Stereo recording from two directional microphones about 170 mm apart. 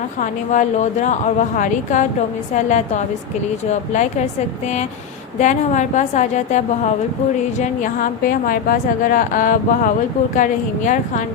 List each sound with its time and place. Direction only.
0.2 s a woman's voice: 45° left (ahead or behind)
7.6 s a woman's voice: 50° left (ahead or behind)